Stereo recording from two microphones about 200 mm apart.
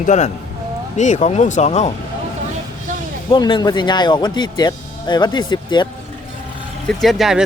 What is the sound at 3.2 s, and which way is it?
Speech, 20° left (ahead or behind).